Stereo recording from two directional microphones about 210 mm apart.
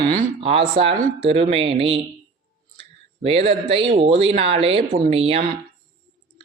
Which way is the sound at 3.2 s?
30° right (ahead or behind).